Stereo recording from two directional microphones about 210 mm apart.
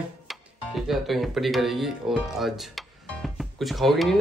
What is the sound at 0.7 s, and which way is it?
Speech, centre (ahead or behind).